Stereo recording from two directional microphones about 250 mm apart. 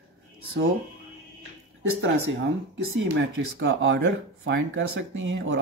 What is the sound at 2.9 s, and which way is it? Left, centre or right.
Speech, right.